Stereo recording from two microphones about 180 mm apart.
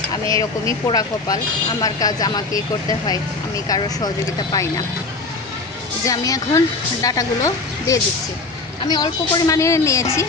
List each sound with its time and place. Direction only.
0.3 s speech: 20° left (ahead or behind)
3.7 s speech: 20° left (ahead or behind)
6.1 s speech: 20° left (ahead or behind)